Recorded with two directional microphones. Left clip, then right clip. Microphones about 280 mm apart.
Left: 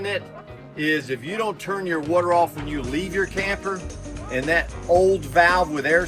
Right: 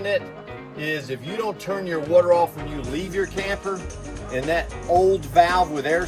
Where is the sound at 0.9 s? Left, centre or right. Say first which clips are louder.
Left 4 dB; centre.